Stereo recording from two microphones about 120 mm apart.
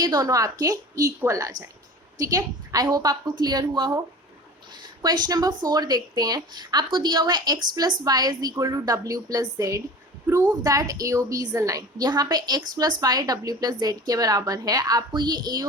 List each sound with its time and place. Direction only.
0.0 s a woman's voice: 35° right (ahead or behind)